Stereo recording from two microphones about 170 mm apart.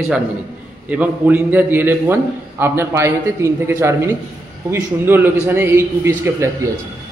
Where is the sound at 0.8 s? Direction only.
10° right (ahead or behind).